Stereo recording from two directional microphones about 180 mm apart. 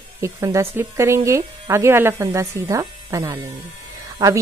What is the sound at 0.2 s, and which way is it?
A woman's voice, 15° right (ahead or behind).